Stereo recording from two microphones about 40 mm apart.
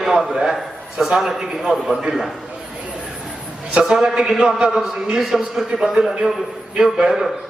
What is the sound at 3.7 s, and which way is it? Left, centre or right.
A man's voice, centre.